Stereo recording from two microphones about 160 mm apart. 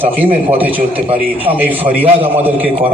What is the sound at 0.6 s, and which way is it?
A man's voice, 10° right (ahead or behind).